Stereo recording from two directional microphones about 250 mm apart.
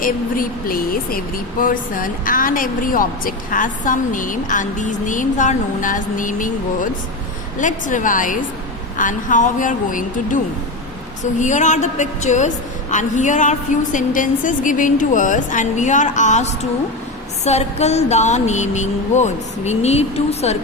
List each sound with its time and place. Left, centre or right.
0.0 s a woman's voice: left